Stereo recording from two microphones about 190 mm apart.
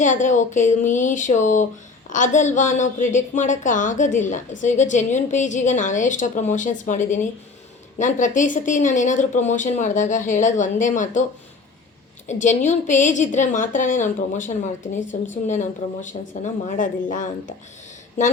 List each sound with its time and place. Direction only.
0.0 s speech: 40° left (ahead or behind)
12.3 s speech: 40° left (ahead or behind)